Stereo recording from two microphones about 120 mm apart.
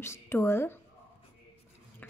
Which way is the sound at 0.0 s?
20° left (ahead or behind).